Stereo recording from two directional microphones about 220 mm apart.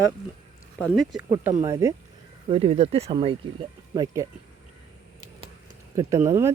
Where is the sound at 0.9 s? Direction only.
Centre (ahead or behind).